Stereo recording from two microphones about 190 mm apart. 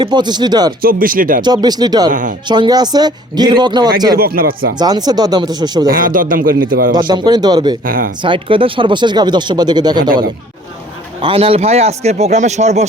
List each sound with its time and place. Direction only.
0.0 s speech: 20° right (ahead or behind)
0.8 s a man's voice: 50° right (ahead or behind)
1.4 s speech: 20° right (ahead or behind)
4.2 s a man's voice: 50° right (ahead or behind)
4.8 s speech: 20° right (ahead or behind)
5.9 s a man's voice: 50° right (ahead or behind)
7.1 s speech: 20° right (ahead or behind)
7.9 s a man's voice: 45° right (ahead or behind)
8.2 s speech: 25° right (ahead or behind)
11.2 s speech: 25° right (ahead or behind)